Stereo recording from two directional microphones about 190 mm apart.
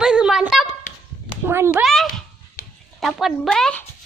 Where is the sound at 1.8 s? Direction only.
Centre (ahead or behind).